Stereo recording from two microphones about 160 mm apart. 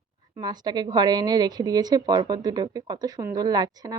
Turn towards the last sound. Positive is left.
turn(degrees=-25)  # may be behind; listen again after turning